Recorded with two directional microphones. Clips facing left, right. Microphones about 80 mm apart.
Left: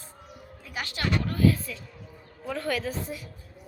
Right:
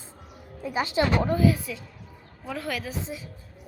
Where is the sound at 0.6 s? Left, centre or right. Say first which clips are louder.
Right 8 dB; right; by 3.0 s centre.